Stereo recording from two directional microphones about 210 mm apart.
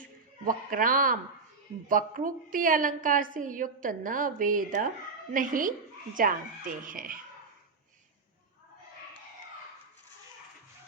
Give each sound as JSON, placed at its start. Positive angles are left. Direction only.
{"t": 0.4, "sound": "a woman's voice", "side_deg": -40}